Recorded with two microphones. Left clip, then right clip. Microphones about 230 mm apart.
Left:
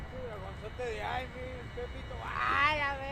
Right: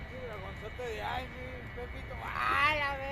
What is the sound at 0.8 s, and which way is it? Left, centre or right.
Speech, right.